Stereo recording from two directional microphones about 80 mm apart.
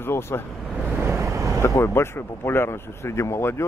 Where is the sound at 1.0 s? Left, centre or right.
Right.